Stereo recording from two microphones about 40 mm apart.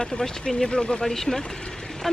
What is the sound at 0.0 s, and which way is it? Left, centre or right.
Speech, centre.